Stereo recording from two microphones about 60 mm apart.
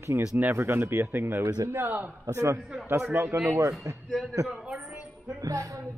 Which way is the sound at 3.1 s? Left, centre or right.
Right.